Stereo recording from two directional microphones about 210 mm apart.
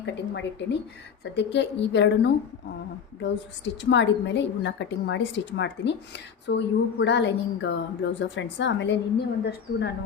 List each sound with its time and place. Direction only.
0.0 s a woman's voice: 55° left (ahead or behind)